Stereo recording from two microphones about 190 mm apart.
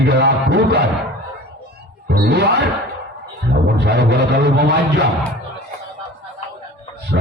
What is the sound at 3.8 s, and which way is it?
Speech, 60° right (ahead or behind).